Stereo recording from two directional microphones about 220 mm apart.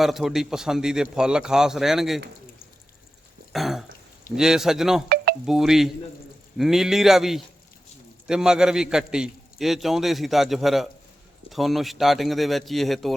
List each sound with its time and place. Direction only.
0.0 s a man's voice: centre (ahead or behind)
3.5 s throat clearing: centre (ahead or behind)
4.4 s a man's voice: 5° right (ahead or behind)
5.0 s a sound: 45° right (ahead or behind)
5.5 s a man's voice: centre (ahead or behind)